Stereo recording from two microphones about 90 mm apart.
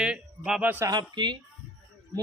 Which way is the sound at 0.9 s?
60° right (ahead or behind).